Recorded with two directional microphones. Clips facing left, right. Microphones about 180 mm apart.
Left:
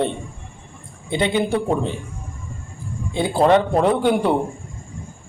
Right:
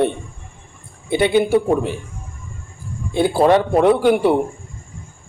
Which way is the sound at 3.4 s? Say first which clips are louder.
Right 1 dB; 10° right (ahead or behind).